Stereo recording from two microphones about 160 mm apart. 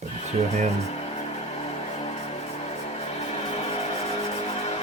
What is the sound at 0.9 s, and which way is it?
Music, 40° left (ahead or behind).